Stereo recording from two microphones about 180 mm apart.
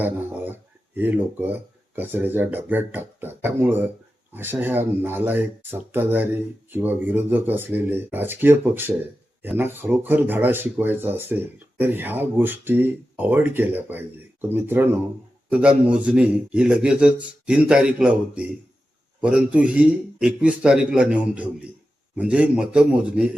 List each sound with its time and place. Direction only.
0.0 s a man's voice: 10° right (ahead or behind)